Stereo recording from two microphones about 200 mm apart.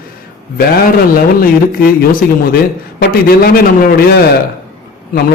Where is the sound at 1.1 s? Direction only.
45° left (ahead or behind).